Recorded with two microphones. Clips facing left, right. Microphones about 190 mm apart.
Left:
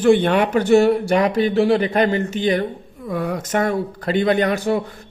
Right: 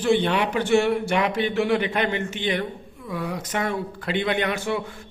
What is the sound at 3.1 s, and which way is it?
Speech, 50° left (ahead or behind).